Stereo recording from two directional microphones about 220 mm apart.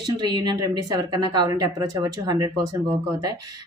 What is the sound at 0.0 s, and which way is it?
Speech, 20° right (ahead or behind).